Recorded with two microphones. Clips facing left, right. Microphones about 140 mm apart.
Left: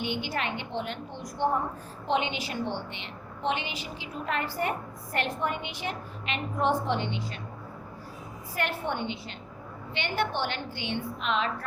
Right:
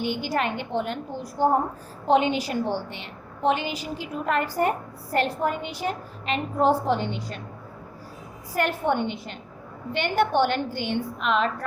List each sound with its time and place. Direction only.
0.0 s a woman's voice: 40° right (ahead or behind)
8.5 s a woman's voice: 45° right (ahead or behind)